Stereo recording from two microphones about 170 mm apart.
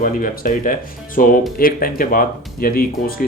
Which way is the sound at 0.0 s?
55° left (ahead or behind).